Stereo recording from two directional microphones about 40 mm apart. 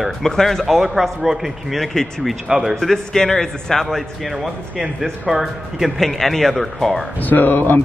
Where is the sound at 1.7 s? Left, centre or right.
Centre.